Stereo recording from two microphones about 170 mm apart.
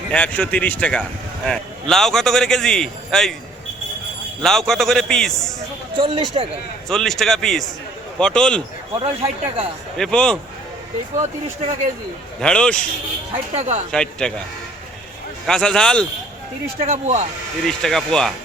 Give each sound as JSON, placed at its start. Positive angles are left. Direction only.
{"t": 0.1, "sound": "a man's voice", "side_deg": 10}
{"t": 4.4, "sound": "a man's voice", "side_deg": 0}
{"t": 6.0, "sound": "speech", "side_deg": -30}
{"t": 6.8, "sound": "a man's voice", "side_deg": 5}
{"t": 9.0, "sound": "speech", "side_deg": -35}
{"t": 10.0, "sound": "a man's voice", "side_deg": 5}
{"t": 11.6, "sound": "speech", "side_deg": -45}
{"t": 12.4, "sound": "a man's voice", "side_deg": 5}
{"t": 13.5, "sound": "speech", "side_deg": -45}
{"t": 13.9, "sound": "a man's voice", "side_deg": 5}
{"t": 15.4, "sound": "a man's voice", "side_deg": 5}
{"t": 16.8, "sound": "speech", "side_deg": -40}
{"t": 17.7, "sound": "a man's voice", "side_deg": 5}